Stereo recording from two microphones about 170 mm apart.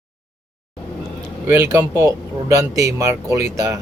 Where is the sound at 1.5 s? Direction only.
15° right (ahead or behind).